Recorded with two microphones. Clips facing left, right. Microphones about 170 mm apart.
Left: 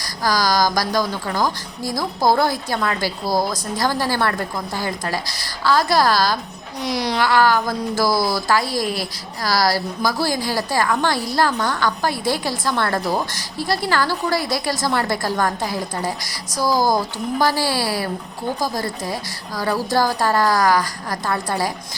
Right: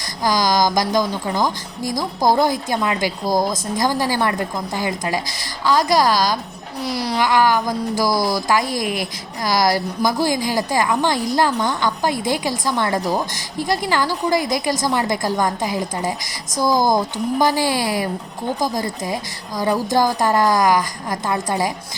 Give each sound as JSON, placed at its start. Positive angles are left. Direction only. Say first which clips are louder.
{"t": 0.3, "sound": "a woman's voice", "louder": "right 1 dB", "side_deg": -20}
{"t": 6.8, "sound": "a woman's voice", "louder": "even", "side_deg": -5}